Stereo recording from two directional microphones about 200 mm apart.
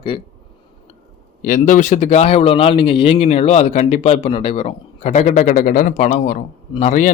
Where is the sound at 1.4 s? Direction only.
40° left (ahead or behind).